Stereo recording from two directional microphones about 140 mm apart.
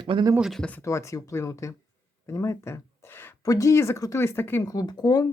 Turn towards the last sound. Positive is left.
turn(degrees=25)  # may be behind; listen again after turning